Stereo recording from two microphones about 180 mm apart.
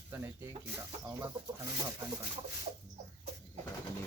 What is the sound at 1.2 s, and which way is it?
Speech, 20° right (ahead or behind).